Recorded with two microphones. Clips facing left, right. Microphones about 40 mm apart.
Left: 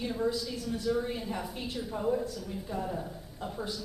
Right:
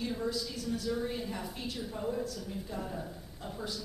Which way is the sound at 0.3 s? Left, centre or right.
Left.